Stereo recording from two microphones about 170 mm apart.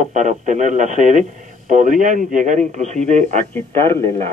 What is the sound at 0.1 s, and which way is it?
Speech, 45° right (ahead or behind).